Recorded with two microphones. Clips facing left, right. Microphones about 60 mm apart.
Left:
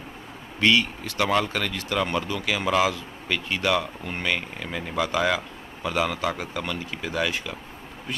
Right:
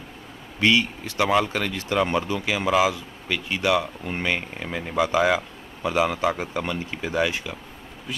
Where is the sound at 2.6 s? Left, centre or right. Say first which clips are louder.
Right 2 dB; centre.